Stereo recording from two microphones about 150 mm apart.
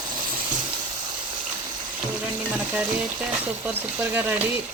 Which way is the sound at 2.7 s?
10° right (ahead or behind).